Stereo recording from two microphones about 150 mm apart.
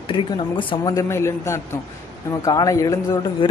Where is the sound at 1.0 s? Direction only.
20° left (ahead or behind).